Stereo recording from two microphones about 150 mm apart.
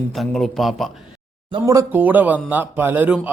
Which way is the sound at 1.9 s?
10° right (ahead or behind).